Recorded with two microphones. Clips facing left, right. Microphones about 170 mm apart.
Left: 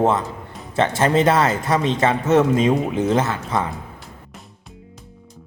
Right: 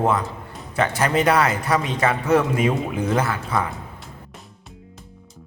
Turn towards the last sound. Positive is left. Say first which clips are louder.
# left 1 dB
turn(degrees=25)  # may be behind; listen again after turning